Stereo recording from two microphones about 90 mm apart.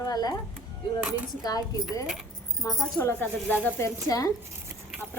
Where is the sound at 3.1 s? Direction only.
20° left (ahead or behind).